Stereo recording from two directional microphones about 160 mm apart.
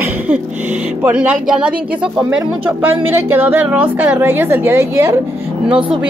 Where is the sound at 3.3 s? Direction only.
10° right (ahead or behind).